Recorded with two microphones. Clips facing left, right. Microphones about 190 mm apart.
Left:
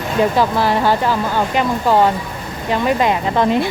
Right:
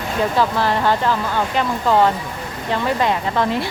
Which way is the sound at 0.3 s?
10° left (ahead or behind).